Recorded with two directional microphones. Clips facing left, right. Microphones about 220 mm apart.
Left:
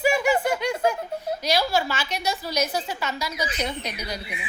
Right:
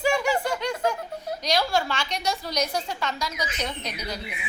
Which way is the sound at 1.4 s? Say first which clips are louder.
Even; 5° left (ahead or behind).